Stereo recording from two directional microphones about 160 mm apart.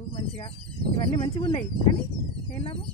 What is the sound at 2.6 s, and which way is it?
Speech, 35° left (ahead or behind).